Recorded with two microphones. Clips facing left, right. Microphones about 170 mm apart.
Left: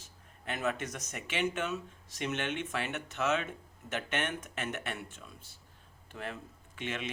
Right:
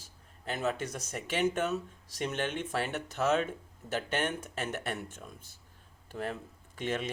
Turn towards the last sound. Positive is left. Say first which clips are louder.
# right 4 dB
turn(degrees=-40)  # may be behind; listen again after turning